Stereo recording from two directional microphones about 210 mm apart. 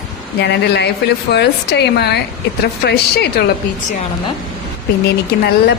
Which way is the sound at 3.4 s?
50° left (ahead or behind).